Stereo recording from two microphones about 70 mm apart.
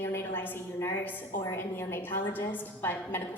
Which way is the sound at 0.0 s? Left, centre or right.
Left.